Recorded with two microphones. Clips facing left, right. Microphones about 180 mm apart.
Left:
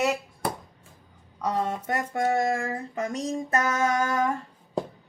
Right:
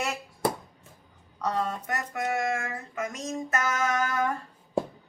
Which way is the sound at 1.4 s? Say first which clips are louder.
Left 2 dB; 15° left (ahead or behind).